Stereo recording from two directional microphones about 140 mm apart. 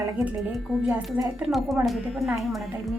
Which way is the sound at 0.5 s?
5° right (ahead or behind).